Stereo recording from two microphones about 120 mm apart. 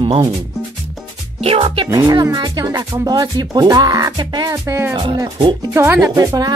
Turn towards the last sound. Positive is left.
turn(degrees=-30)  # may be behind; listen again after turning